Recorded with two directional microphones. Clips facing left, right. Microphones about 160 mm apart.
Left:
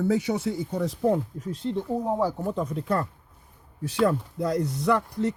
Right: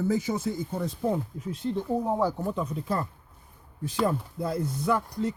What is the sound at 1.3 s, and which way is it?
Speech, 40° left (ahead or behind).